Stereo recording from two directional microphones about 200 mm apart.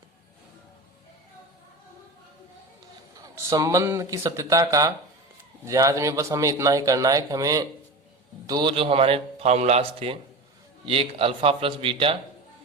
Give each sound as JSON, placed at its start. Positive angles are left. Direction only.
{"t": 3.3, "sound": "a man's voice", "side_deg": -15}